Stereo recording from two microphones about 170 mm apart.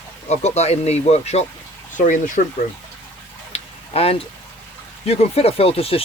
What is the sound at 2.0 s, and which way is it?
Speech, 50° left (ahead or behind).